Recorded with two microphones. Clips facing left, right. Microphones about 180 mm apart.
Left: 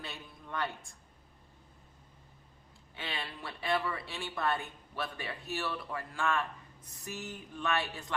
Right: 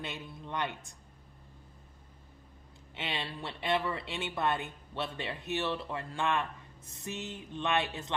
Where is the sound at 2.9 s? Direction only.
20° right (ahead or behind).